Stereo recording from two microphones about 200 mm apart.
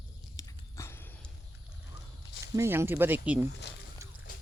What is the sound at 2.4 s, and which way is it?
Speech, 15° right (ahead or behind).